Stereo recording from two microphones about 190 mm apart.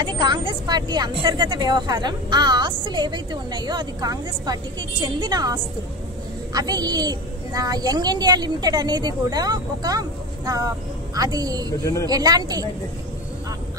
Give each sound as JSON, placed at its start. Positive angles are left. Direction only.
{"t": 0.0, "sound": "speech", "side_deg": -25}
{"t": 11.8, "sound": "speech", "side_deg": 15}
{"t": 12.1, "sound": "speech", "side_deg": -20}